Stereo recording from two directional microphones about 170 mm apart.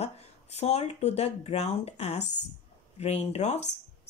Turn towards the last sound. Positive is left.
turn(degrees=40)  # may be behind; listen again after turning